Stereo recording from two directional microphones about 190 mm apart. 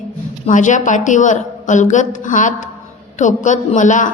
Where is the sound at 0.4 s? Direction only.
40° left (ahead or behind).